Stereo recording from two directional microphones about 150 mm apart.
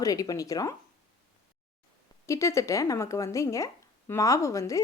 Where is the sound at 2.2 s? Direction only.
20° left (ahead or behind).